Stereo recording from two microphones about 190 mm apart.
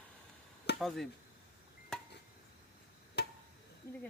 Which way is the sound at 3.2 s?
60° left (ahead or behind).